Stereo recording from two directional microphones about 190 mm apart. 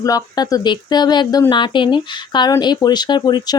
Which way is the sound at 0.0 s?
20° left (ahead or behind).